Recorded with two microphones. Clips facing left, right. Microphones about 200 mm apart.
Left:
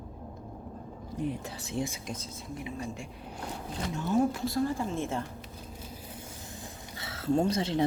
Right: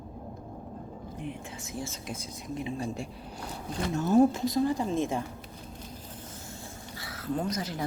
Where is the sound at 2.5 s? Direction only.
30° right (ahead or behind).